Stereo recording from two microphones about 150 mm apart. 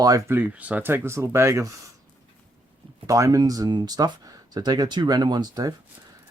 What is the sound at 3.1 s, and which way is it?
Speech, 20° right (ahead or behind).